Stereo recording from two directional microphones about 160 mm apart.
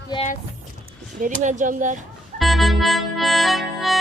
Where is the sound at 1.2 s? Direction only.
55° right (ahead or behind).